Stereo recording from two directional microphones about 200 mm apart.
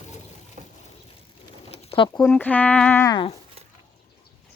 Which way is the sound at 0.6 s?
35° right (ahead or behind).